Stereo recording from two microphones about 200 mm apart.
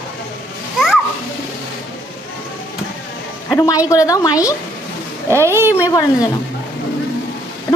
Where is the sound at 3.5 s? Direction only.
15° left (ahead or behind).